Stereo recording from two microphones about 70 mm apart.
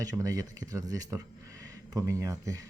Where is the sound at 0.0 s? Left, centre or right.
Right.